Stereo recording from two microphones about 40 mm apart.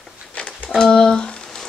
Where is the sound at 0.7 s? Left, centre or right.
Centre.